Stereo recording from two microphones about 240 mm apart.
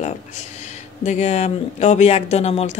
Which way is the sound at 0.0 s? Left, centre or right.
Left.